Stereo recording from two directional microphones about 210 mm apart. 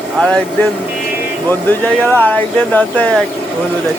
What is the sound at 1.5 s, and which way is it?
Speech, 10° left (ahead or behind).